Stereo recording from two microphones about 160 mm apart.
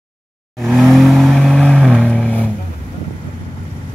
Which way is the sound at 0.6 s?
Centre (ahead or behind).